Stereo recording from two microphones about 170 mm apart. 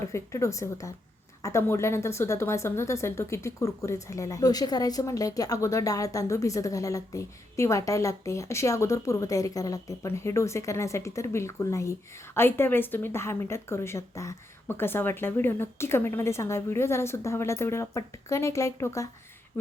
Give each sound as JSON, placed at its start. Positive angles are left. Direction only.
{"t": 0.1, "sound": "a woman's voice", "side_deg": 15}